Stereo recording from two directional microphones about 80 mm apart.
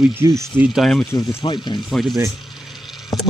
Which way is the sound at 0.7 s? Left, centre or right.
Centre.